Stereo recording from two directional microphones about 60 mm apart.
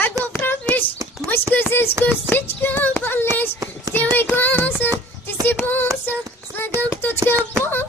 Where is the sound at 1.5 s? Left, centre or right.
Left.